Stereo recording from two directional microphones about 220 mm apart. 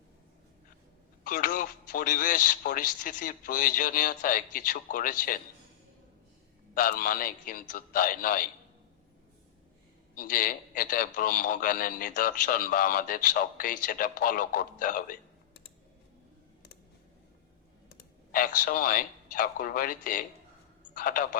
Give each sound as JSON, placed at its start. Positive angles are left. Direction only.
{"t": 1.2, "sound": "a man's voice", "side_deg": 40}
{"t": 6.7, "sound": "a man's voice", "side_deg": 40}
{"t": 10.2, "sound": "a man's voice", "side_deg": 40}
{"t": 17.8, "sound": "a man's voice", "side_deg": 40}